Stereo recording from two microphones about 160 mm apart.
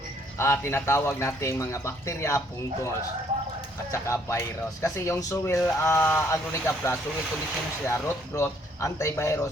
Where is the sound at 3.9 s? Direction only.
20° left (ahead or behind).